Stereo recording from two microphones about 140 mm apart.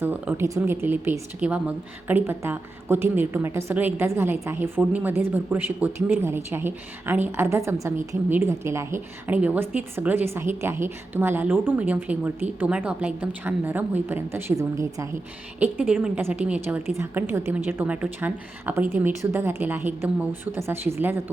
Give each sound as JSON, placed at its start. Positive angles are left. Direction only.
{"t": 0.0, "sound": "a woman's voice", "side_deg": -15}
{"t": 15.6, "sound": "a woman's voice", "side_deg": -10}